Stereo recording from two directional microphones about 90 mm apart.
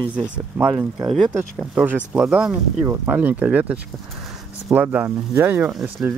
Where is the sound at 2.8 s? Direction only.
20° right (ahead or behind).